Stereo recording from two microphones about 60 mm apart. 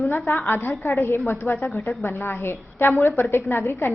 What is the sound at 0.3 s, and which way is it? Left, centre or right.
Speech, left.